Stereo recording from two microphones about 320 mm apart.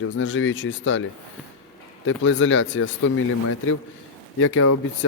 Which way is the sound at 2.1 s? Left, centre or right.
Left.